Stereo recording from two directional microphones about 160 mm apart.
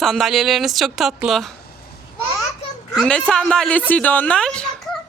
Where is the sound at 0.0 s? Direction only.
Centre (ahead or behind).